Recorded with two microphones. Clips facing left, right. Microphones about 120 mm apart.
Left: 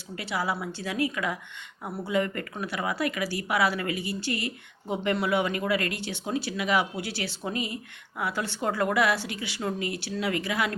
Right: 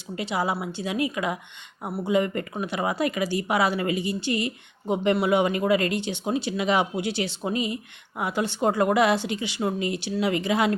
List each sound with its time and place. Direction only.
0.2 s speech: 20° right (ahead or behind)